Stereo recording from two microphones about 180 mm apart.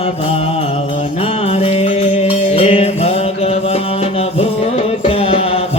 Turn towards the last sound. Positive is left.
turn(degrees=35)  # may be behind; listen again after turning